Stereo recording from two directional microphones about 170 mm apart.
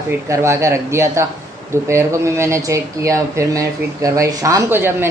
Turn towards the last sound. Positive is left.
turn(degrees=-15)  # may be behind; listen again after turning